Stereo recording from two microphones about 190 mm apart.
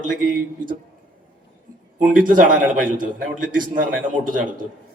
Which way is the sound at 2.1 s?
45° right (ahead or behind).